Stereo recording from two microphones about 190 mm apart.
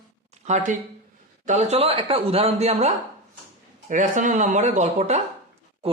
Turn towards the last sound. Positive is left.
turn(degrees=-35)  # may be behind; listen again after turning